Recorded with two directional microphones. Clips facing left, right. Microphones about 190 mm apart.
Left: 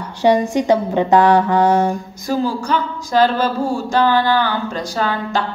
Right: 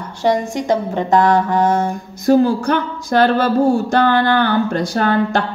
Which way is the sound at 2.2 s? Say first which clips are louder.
Right 7 dB; 55° right (ahead or behind).